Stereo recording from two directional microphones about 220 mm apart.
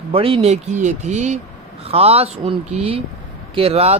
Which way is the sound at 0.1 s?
25° right (ahead or behind).